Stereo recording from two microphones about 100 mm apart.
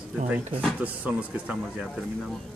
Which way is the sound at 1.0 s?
15° right (ahead or behind).